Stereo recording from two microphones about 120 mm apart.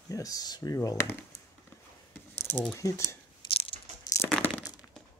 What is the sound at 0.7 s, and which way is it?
Speech, 20° left (ahead or behind).